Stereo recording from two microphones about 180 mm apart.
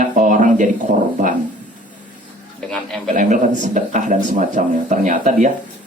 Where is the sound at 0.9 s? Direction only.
45° right (ahead or behind).